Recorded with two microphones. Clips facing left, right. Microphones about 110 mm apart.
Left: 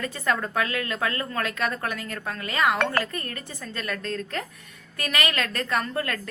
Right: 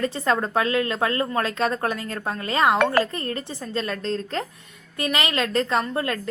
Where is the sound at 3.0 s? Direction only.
30° right (ahead or behind).